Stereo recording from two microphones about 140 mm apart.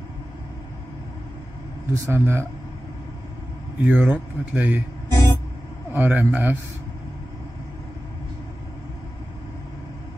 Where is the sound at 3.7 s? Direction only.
10° right (ahead or behind).